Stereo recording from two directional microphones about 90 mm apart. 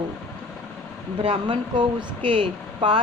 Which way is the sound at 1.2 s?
70° right (ahead or behind).